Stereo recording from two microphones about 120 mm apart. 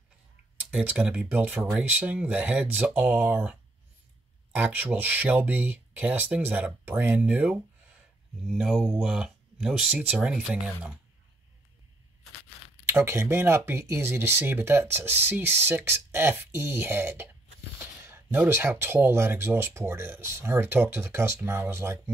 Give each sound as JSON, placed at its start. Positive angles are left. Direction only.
{"t": 0.6, "sound": "speech", "side_deg": -10}
{"t": 12.8, "sound": "speech", "side_deg": -20}